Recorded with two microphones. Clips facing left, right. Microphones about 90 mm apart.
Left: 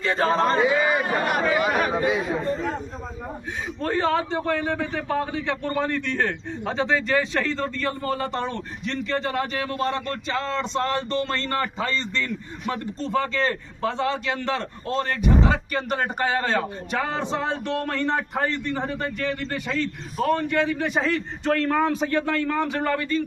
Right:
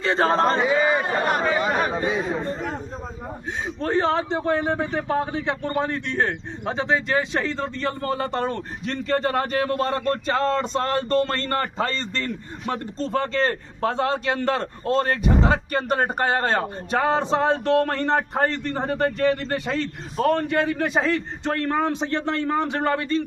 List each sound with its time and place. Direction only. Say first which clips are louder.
0.0 s a man's voice: right 2 dB; 30° right (ahead or behind)
3.8 s a man's voice: right 1 dB; 25° right (ahead or behind)
21.9 s a man's voice: left 1 dB; 25° right (ahead or behind)